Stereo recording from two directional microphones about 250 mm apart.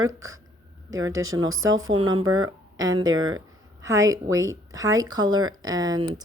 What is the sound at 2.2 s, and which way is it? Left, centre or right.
Speech, right.